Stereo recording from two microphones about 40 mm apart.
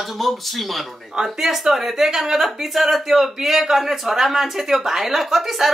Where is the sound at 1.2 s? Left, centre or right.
Centre.